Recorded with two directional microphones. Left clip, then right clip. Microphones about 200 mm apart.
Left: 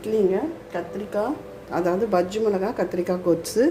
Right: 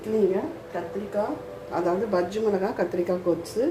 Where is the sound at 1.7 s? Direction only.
35° left (ahead or behind).